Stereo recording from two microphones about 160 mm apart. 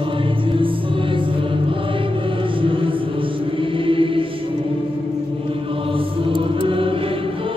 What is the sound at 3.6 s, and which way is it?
Mantra, 35° right (ahead or behind).